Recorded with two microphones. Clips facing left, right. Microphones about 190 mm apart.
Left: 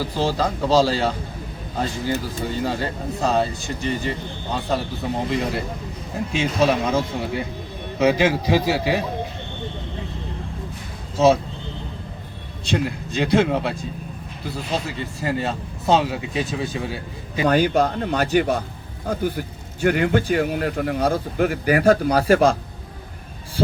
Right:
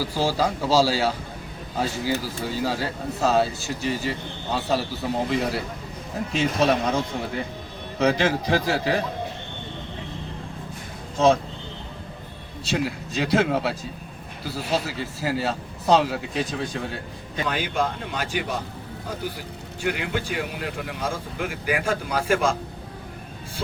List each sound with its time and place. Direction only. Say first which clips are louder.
0.0 s a man's voice: left 1 dB; 10° right (ahead or behind)
12.6 s speech: left 2 dB; 5° right (ahead or behind)
17.5 s speech: left 8 dB; 40° left (ahead or behind)
19.8 s speech: left 8 dB; 45° left (ahead or behind)